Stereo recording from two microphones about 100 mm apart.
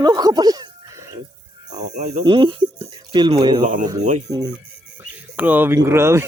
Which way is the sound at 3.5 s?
40° right (ahead or behind).